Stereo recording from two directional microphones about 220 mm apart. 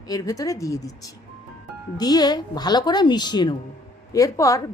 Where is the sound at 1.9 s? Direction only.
20° left (ahead or behind).